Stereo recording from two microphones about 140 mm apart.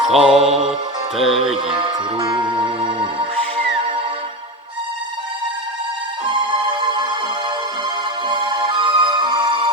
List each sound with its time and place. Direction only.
0.1 s music: 5° right (ahead or behind)
0.5 s music: 45° right (ahead or behind)
1.1 s music: centre (ahead or behind)
1.6 s music: 40° right (ahead or behind)
6.2 s music: 35° right (ahead or behind)
8.3 s music: 35° right (ahead or behind)